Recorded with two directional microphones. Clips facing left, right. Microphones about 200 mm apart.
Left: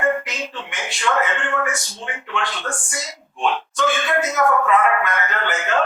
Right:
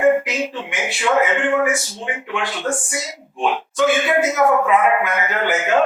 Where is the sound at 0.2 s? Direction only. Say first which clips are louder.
Right 6 dB; 10° right (ahead or behind).